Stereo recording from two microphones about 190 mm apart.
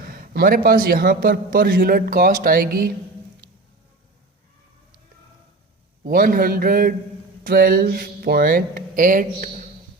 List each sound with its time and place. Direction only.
0.1 s a man's voice: 50° right (ahead or behind)
6.1 s a man's voice: 50° right (ahead or behind)